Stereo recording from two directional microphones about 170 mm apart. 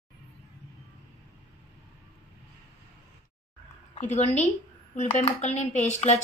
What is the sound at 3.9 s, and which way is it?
A woman's voice, 40° left (ahead or behind).